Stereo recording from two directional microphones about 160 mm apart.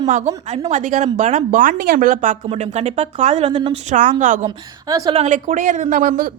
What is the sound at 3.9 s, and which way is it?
Speech, 50° right (ahead or behind).